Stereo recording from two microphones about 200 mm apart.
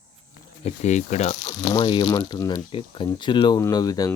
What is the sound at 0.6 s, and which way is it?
Speech, 35° left (ahead or behind).